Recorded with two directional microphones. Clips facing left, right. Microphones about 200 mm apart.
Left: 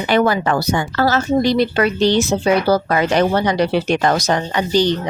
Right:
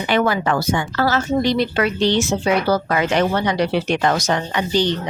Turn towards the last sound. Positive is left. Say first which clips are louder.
# left 3 dB
turn(degrees=40)  # may be behind; listen again after turning